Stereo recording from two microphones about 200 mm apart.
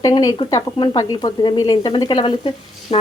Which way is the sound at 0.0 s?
20° left (ahead or behind).